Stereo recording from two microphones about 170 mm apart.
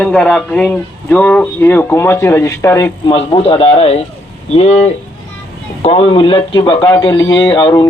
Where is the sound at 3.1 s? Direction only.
35° left (ahead or behind).